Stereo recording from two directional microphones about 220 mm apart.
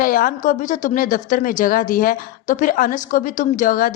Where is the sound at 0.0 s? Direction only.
40° left (ahead or behind).